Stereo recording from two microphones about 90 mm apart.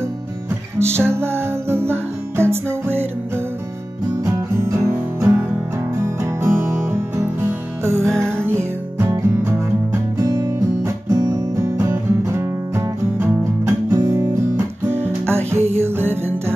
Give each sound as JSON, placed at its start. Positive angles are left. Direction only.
{"t": 0.7, "sound": "music", "side_deg": -30}
{"t": 4.2, "sound": "music", "side_deg": -35}
{"t": 10.1, "sound": "music", "side_deg": -40}
{"t": 14.9, "sound": "music", "side_deg": -25}